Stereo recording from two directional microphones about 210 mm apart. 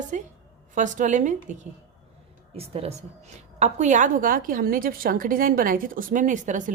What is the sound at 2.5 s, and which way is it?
A woman's voice, 30° right (ahead or behind).